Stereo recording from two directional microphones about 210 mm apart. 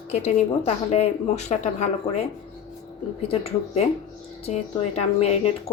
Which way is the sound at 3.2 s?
30° left (ahead or behind).